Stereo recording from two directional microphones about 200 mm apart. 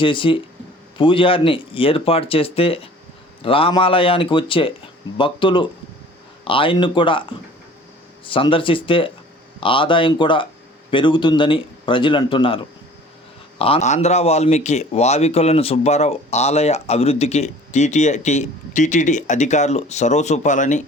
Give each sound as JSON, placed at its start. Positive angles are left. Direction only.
{"t": 0.0, "sound": "speech", "side_deg": 25}
{"t": 13.6, "sound": "speech", "side_deg": 30}